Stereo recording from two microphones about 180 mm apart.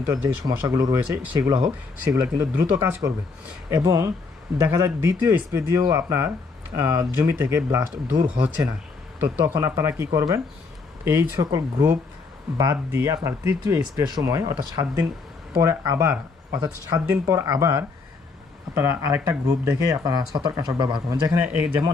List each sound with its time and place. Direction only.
0.0 s speech: 15° right (ahead or behind)
21.4 s speech: 10° right (ahead or behind)